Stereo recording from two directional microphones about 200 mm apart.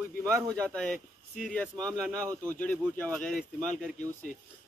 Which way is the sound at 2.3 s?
15° right (ahead or behind).